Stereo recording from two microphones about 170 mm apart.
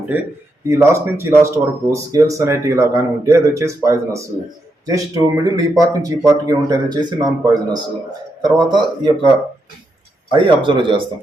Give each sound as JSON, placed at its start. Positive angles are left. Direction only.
{"t": 0.7, "sound": "speech", "side_deg": -15}
{"t": 10.3, "sound": "speech", "side_deg": -30}